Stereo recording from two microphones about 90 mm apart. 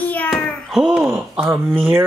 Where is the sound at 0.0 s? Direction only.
15° left (ahead or behind).